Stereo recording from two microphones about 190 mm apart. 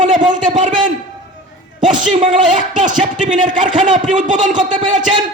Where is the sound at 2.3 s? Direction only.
45° right (ahead or behind).